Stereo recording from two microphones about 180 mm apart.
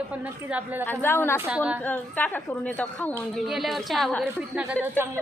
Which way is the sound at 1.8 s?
10° left (ahead or behind).